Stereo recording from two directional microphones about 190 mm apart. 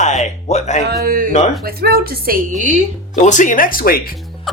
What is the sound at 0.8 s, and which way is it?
A woman's voice, 50° right (ahead or behind).